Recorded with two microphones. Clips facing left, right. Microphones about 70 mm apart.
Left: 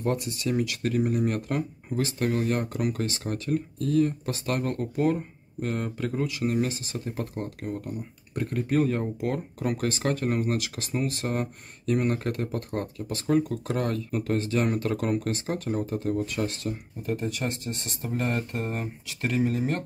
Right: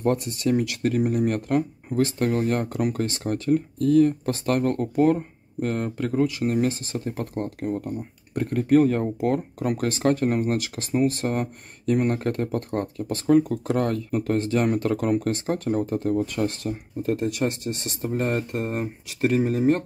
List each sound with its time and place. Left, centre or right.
0.0 s speech: right
18.3 s speech: right